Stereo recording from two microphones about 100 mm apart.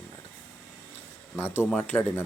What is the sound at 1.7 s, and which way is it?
Speech, 15° left (ahead or behind).